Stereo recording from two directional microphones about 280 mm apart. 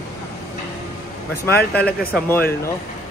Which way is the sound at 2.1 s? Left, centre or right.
Centre.